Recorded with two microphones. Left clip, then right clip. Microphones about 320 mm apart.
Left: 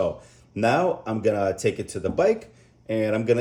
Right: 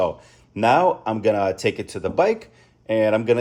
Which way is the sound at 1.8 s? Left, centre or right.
Centre.